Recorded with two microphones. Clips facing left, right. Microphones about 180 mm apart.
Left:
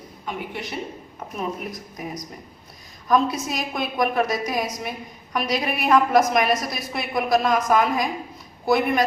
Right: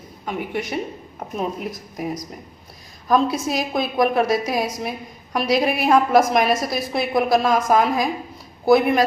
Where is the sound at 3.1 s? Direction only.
35° right (ahead or behind).